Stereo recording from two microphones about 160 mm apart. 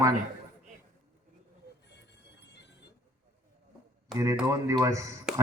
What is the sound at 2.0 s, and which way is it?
Music, 90° left.